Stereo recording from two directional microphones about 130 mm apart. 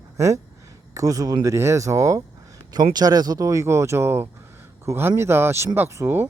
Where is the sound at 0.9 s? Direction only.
25° right (ahead or behind).